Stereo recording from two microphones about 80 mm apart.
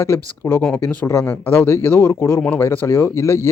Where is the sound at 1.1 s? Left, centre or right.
Left.